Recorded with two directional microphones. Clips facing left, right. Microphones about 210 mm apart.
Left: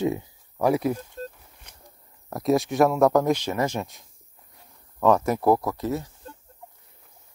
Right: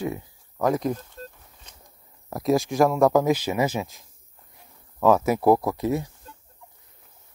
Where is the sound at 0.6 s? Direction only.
10° left (ahead or behind).